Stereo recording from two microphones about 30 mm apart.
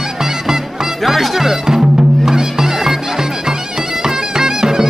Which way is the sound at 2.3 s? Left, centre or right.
Centre.